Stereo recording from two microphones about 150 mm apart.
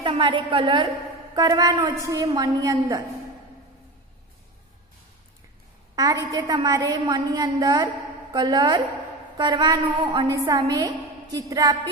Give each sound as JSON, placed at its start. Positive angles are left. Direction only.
{"t": 0.0, "sound": "a woman's voice", "side_deg": -35}
{"t": 5.9, "sound": "a woman's voice", "side_deg": -25}